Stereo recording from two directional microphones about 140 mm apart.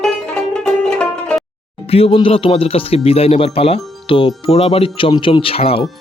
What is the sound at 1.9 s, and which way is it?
Speech, 45° left (ahead or behind).